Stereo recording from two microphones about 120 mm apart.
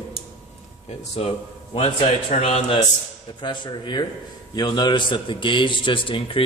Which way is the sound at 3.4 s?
40° left (ahead or behind).